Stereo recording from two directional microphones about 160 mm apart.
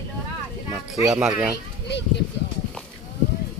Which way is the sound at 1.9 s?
90° left.